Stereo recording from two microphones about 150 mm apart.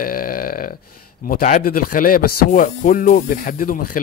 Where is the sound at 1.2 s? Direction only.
65° left (ahead or behind).